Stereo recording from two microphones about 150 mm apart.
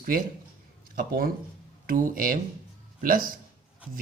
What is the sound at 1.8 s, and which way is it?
Speech, 65° right (ahead or behind).